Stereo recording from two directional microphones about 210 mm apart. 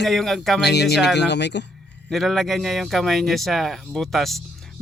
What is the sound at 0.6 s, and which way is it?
Speech, 55° left (ahead or behind).